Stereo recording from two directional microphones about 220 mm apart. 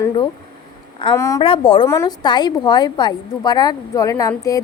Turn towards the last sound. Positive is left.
turn(degrees=15)  # may be behind; listen again after turning